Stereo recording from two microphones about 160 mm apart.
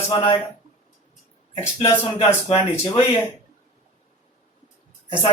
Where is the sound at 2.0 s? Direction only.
35° left (ahead or behind).